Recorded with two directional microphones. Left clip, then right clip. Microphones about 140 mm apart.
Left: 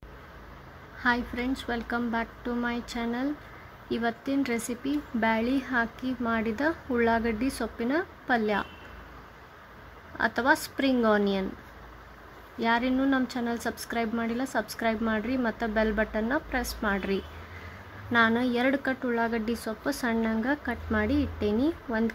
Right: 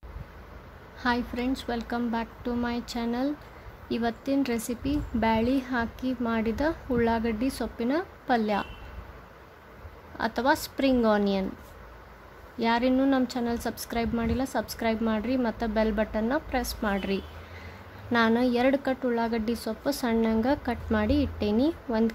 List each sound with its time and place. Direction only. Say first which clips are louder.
1.0 s speech: left 1 dB; 15° right (ahead or behind)
10.1 s speech: left 1 dB; 10° right (ahead or behind)
12.5 s speech: right 1 dB; 15° right (ahead or behind)